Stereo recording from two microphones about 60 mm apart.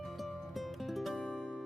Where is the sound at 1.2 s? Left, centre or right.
Centre.